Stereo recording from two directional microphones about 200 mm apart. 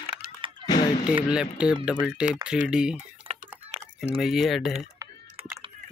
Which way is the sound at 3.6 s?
30° right (ahead or behind).